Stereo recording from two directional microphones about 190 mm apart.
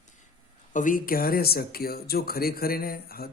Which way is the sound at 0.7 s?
45° left (ahead or behind).